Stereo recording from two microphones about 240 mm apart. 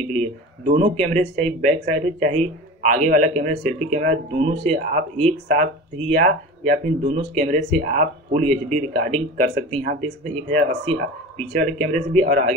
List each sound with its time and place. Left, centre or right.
0.1 s speech: right